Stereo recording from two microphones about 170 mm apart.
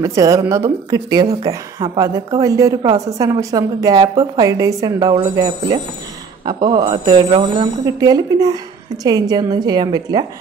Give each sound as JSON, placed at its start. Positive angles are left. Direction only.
{"t": 0.0, "sound": "a woman's voice", "side_deg": -20}